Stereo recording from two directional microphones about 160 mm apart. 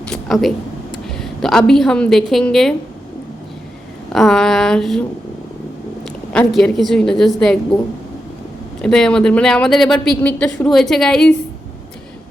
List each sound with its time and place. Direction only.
0.1 s a sound: centre (ahead or behind)
1.0 s a woman's voice: centre (ahead or behind)
4.1 s speech: centre (ahead or behind)
6.5 s speech: centre (ahead or behind)
8.8 s speech: 5° left (ahead or behind)